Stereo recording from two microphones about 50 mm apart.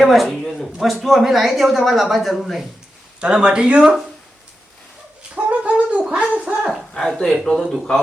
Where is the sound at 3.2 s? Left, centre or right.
Centre.